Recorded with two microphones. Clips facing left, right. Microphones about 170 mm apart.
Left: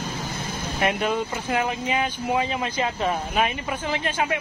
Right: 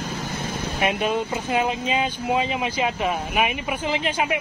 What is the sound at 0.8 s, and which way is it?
Speech, 20° right (ahead or behind).